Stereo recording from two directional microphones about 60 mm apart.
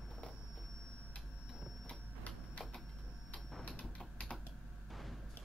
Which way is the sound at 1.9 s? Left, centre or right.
Left.